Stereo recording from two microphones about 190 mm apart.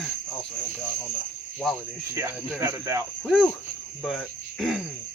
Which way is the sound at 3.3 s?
Centre (ahead or behind).